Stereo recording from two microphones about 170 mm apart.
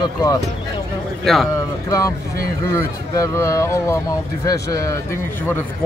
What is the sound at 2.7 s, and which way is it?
Speech, 15° left (ahead or behind).